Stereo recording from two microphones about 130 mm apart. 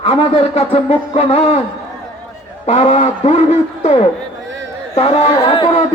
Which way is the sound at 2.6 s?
55° left (ahead or behind).